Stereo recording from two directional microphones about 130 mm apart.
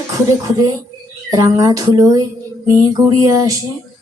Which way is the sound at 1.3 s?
25° right (ahead or behind).